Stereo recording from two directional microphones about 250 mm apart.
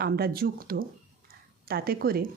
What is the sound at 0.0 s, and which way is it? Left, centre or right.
Speech, right.